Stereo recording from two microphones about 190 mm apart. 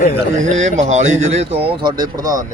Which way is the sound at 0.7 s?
40° right (ahead or behind).